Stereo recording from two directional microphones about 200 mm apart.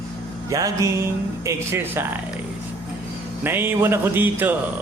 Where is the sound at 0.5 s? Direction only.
15° right (ahead or behind).